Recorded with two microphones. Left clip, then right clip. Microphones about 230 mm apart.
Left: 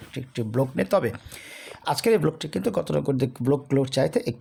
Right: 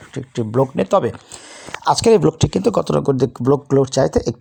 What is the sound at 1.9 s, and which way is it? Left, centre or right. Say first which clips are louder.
Speech: right 9 dB; right.